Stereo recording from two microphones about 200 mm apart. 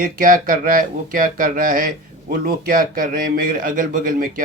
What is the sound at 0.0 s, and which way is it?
A man's voice, 45° right (ahead or behind).